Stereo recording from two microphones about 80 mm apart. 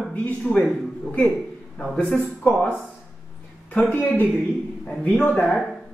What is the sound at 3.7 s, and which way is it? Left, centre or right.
A woman's voice, centre.